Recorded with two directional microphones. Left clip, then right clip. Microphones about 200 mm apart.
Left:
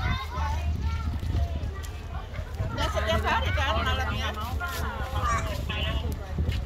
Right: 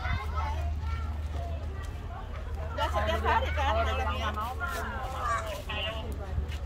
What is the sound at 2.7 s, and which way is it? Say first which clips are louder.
Vehicle: left 2 dB; 50° right (ahead or behind).